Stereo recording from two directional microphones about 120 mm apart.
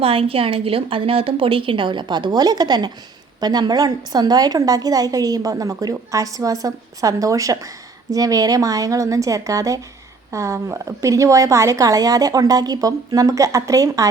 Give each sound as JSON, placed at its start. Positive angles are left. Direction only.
{"t": 0.0, "sound": "a woman's voice", "side_deg": -50}